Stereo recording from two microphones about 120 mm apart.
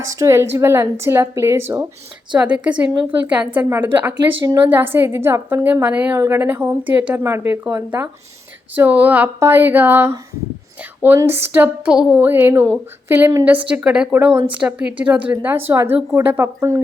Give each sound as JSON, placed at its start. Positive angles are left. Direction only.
{"t": 0.0, "sound": "a woman's voice", "side_deg": -25}
{"t": 2.3, "sound": "a woman's voice", "side_deg": -10}
{"t": 11.2, "sound": "a woman's voice", "side_deg": -20}